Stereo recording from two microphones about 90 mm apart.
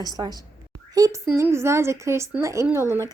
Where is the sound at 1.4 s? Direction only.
30° right (ahead or behind).